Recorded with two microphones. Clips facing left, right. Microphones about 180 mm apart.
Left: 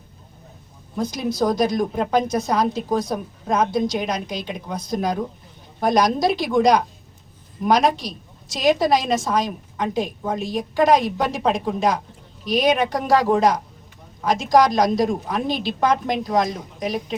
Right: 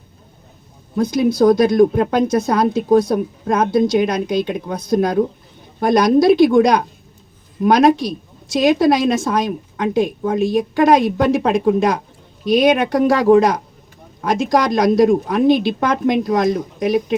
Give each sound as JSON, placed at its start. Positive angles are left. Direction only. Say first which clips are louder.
{"t": 0.9, "sound": "a woman's voice", "louder": "right 7 dB", "side_deg": -60}